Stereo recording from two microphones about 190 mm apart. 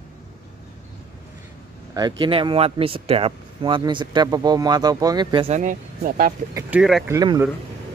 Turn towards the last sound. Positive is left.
turn(degrees=-20)  # may be behind; listen again after turning